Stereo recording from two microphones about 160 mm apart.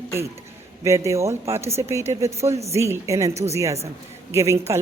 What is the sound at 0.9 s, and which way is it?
A woman's voice, 20° right (ahead or behind).